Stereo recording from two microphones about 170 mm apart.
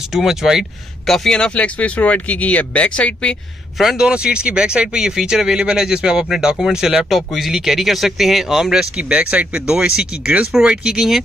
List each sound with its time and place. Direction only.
0.1 s speech: centre (ahead or behind)